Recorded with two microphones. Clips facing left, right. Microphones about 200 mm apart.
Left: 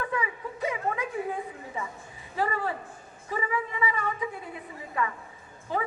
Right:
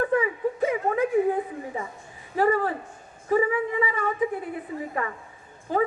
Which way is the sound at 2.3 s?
45° right (ahead or behind).